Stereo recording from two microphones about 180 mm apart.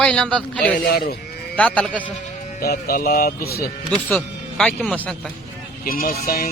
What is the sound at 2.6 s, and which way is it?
Speech, 55° left (ahead or behind).